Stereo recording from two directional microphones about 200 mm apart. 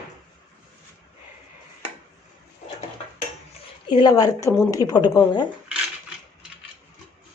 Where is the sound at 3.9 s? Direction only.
20° left (ahead or behind).